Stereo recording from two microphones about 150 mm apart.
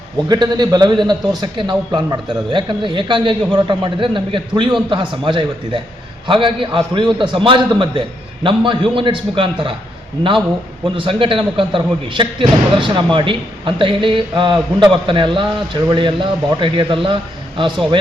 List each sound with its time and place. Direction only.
0.3 s a man's voice: 30° right (ahead or behind)
10.8 s a man's voice: 35° right (ahead or behind)